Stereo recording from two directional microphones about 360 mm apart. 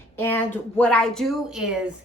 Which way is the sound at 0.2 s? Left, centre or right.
Centre.